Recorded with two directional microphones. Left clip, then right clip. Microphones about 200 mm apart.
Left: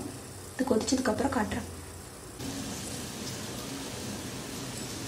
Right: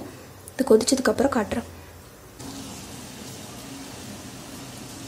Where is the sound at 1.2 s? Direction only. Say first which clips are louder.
Right 7 dB; 55° right (ahead or behind).